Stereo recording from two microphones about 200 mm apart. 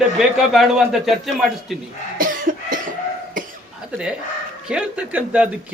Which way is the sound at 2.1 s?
45° right (ahead or behind).